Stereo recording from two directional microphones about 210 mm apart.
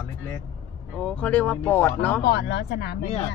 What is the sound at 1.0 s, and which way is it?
Speech, 5° left (ahead or behind).